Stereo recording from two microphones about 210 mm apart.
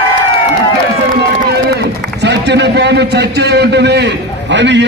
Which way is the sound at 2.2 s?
55° right (ahead or behind).